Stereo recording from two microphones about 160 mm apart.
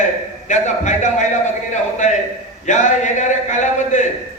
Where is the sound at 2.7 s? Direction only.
50° left (ahead or behind).